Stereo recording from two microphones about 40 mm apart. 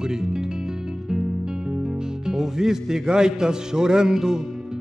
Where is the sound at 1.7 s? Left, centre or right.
Right.